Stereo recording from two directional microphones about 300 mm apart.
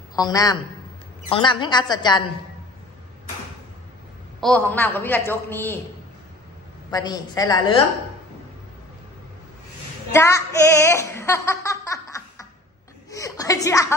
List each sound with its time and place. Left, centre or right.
0.1 s a man's voice: centre
4.4 s a woman's voice: centre
6.9 s a woman's voice: centre
10.1 s a woman's voice: centre